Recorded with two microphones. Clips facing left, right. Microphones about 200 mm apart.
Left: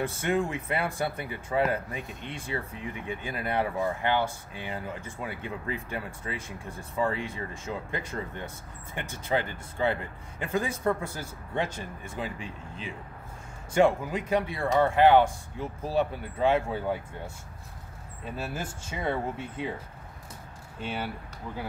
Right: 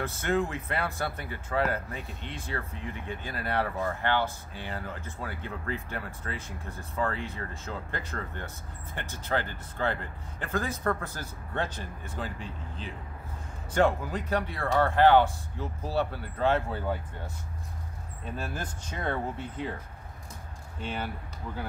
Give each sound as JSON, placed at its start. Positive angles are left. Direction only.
{"t": 0.2, "sound": "speech", "side_deg": 15}
{"t": 13.7, "sound": "speech", "side_deg": 10}
{"t": 18.2, "sound": "speech", "side_deg": 10}
{"t": 20.8, "sound": "speech", "side_deg": 10}